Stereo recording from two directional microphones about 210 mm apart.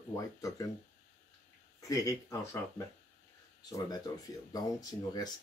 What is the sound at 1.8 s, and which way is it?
Speech, 15° left (ahead or behind).